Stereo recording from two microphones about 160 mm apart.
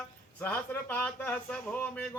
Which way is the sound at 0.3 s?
10° left (ahead or behind).